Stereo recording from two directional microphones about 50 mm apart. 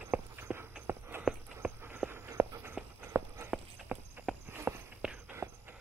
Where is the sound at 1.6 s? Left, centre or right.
Right.